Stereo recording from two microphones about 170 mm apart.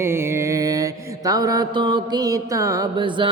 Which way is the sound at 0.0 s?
15° right (ahead or behind).